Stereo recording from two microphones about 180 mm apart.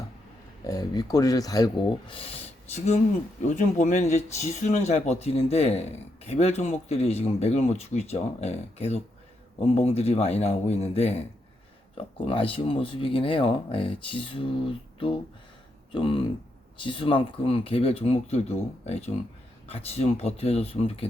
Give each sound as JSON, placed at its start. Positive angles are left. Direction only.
{"t": 0.7, "sound": "speech", "side_deg": 20}
{"t": 15.9, "sound": "speech", "side_deg": 30}